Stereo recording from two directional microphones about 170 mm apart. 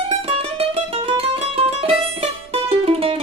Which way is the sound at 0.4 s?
35° right (ahead or behind).